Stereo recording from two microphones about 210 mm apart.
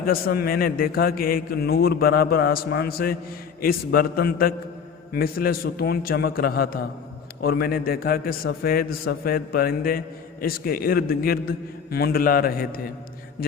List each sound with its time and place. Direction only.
0.0 s a man's voice: 45° left (ahead or behind)